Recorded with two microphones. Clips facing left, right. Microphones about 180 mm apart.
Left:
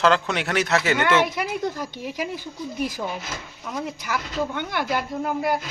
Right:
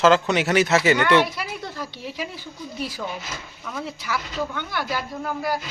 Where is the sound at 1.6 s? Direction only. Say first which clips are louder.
Left 5 dB; 15° left (ahead or behind).